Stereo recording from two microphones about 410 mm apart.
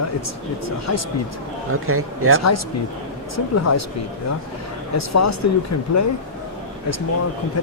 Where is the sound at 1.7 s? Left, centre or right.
Right.